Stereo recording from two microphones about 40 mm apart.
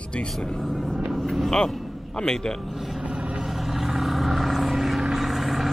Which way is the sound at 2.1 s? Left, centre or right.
Centre.